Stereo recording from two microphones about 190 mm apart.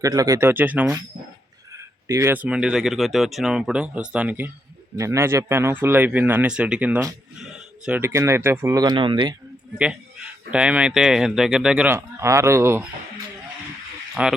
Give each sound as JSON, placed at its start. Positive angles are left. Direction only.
{"t": 0.0, "sound": "speech", "side_deg": -20}
{"t": 9.7, "sound": "speech", "side_deg": -5}
{"t": 14.2, "sound": "speech", "side_deg": -5}